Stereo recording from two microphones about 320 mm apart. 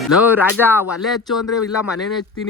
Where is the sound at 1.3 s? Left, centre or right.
Left.